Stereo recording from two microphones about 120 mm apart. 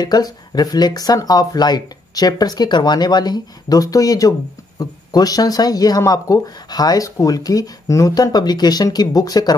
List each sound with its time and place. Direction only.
0.0 s speech: 35° left (ahead or behind)